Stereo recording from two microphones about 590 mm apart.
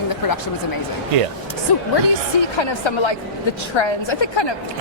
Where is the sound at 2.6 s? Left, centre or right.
Left.